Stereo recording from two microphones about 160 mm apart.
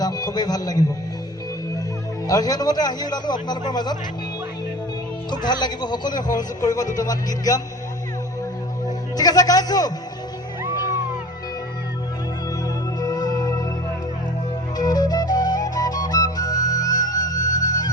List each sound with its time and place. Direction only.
0.0 s a man's voice: 25° left (ahead or behind)
2.2 s speech: 25° left (ahead or behind)
5.5 s speech: 25° left (ahead or behind)
9.1 s speech: 25° left (ahead or behind)
12.6 s music: 25° left (ahead or behind)
14.8 s flute: 25° left (ahead or behind)
17.6 s music: 25° left (ahead or behind)